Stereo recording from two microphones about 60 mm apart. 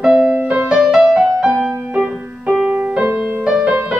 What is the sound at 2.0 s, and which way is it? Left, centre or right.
Music, right.